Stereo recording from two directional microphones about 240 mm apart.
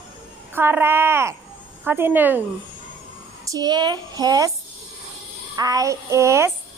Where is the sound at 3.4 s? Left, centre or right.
Centre.